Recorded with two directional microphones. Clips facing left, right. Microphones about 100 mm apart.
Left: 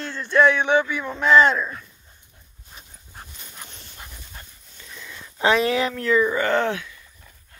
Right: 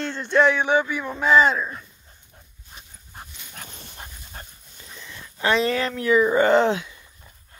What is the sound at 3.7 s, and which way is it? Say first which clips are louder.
Dog: right 2 dB; 45° right (ahead or behind).